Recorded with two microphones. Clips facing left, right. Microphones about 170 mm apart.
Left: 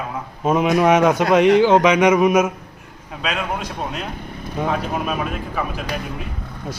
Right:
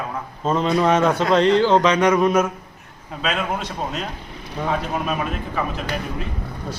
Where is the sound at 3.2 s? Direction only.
5° left (ahead or behind).